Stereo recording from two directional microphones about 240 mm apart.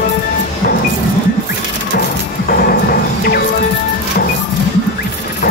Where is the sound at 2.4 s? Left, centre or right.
Left.